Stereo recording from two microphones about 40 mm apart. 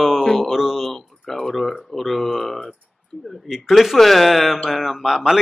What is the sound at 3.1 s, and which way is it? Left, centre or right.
Speech, left.